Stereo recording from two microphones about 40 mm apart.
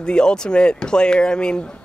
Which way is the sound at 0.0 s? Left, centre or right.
Left.